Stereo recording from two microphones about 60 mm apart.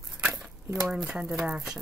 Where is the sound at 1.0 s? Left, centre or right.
Centre.